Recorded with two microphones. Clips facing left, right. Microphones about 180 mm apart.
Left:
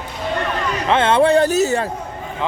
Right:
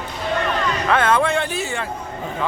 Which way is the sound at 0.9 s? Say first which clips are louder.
Left 5 dB; 25° left (ahead or behind).